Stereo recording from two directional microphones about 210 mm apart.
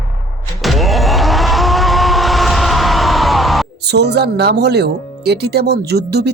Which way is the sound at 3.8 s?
55° right (ahead or behind).